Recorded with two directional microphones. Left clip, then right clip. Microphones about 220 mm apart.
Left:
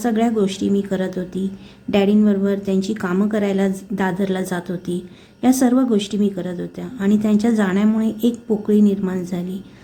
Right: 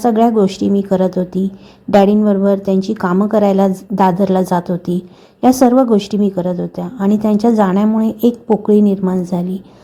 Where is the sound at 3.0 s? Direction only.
Centre (ahead or behind).